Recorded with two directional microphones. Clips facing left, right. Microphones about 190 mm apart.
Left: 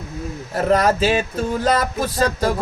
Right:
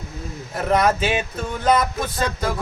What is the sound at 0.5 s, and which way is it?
Chant, 35° left (ahead or behind).